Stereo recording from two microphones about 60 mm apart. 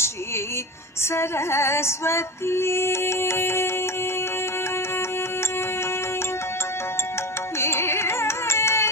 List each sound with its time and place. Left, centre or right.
1.0 s female singing: left
7.6 s music: left